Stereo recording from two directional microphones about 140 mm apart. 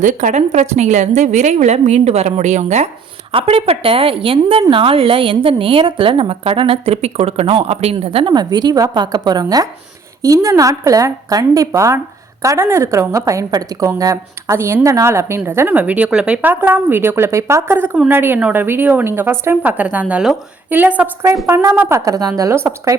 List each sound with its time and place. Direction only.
0.0 s a woman's voice: 65° right (ahead or behind)
3.3 s a woman's voice: 45° right (ahead or behind)
8.3 s a woman's voice: 30° right (ahead or behind)